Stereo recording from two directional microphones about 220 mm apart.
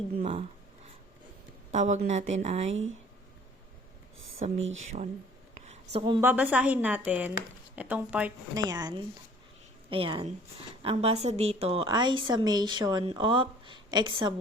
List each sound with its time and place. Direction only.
0.2 s a woman's voice: 25° right (ahead or behind)
1.7 s speech: 35° right (ahead or behind)
4.5 s speech: 60° right (ahead or behind)
5.5 s a sound: 30° right (ahead or behind)
6.2 s speech: 5° right (ahead or behind)
8.5 s a woman's voice: 20° right (ahead or behind)